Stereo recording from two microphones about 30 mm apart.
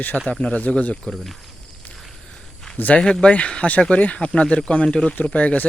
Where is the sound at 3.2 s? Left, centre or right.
Left.